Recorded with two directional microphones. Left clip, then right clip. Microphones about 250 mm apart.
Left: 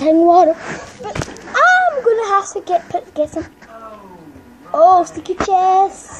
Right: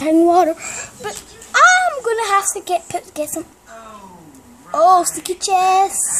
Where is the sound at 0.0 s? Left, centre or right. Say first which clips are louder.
Left 3 dB; centre.